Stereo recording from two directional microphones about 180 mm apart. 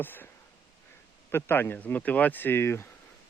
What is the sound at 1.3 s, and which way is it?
Speech, 10° left (ahead or behind).